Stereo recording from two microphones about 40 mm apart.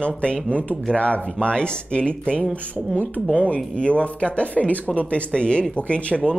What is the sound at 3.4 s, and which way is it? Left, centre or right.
Speech, left.